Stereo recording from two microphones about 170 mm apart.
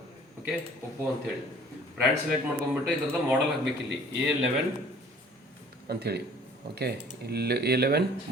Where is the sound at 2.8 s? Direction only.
5° right (ahead or behind).